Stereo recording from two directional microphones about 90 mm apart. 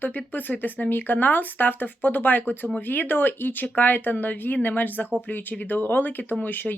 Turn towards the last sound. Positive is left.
turn(degrees=20)  # may be behind; listen again after turning